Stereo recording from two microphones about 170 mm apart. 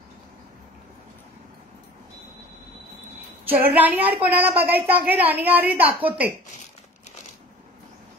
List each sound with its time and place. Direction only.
3.4 s a woman's voice: 10° right (ahead or behind)